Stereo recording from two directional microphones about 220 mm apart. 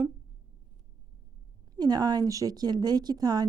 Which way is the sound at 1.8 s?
20° right (ahead or behind).